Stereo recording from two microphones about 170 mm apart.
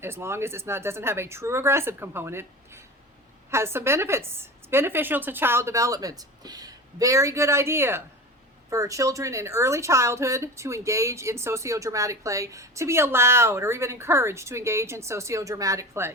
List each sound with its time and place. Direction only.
0.0 s speech: 15° right (ahead or behind)